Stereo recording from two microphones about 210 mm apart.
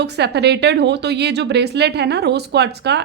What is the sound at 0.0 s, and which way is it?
A woman's voice, 55° right (ahead or behind).